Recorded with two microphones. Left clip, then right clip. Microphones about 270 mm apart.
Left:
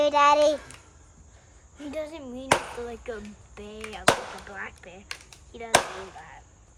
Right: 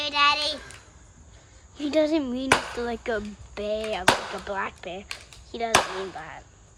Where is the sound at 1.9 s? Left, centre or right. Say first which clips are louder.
Right 12 dB; right.